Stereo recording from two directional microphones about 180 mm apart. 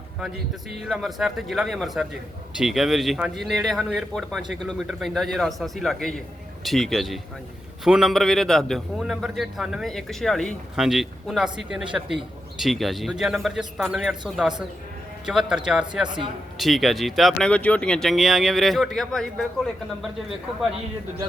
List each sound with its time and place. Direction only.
0.9 s a man's voice: centre (ahead or behind)
16.0 s a man's voice: 25° right (ahead or behind)
16.6 s a man's voice: centre (ahead or behind)